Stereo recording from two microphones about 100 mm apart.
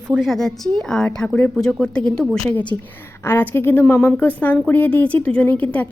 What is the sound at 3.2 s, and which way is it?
A woman's voice, 25° left (ahead or behind).